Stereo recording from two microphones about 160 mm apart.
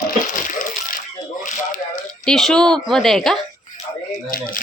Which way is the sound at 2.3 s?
5° left (ahead or behind).